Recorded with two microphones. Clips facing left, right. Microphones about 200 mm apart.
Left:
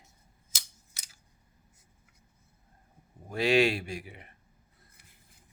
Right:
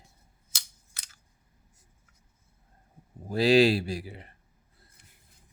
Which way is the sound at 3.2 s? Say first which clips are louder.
Right 4 dB; 35° right (ahead or behind).